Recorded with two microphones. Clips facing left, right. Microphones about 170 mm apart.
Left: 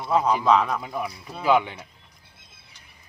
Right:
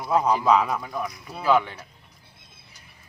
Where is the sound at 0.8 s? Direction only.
15° left (ahead or behind).